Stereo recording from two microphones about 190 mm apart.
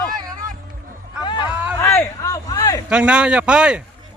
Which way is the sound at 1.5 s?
10° right (ahead or behind).